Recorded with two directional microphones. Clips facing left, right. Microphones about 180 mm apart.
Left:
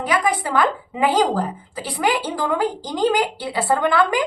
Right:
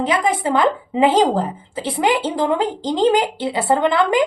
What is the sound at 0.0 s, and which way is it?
A woman's voice, 25° right (ahead or behind).